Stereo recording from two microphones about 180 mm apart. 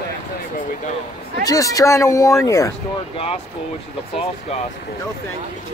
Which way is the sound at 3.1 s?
35° left (ahead or behind).